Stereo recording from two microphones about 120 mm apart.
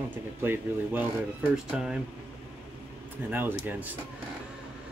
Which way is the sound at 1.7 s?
5° right (ahead or behind).